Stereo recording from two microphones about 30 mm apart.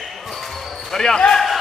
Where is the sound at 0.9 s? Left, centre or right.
Centre.